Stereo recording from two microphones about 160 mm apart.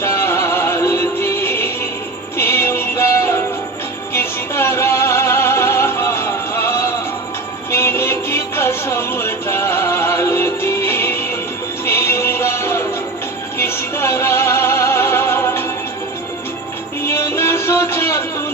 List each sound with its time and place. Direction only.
0.0 s music: 15° left (ahead or behind)
17.1 s music: 15° left (ahead or behind)